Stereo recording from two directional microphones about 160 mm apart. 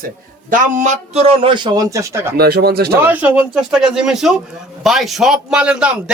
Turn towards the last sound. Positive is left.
turn(degrees=-5)  # may be behind; listen again after turning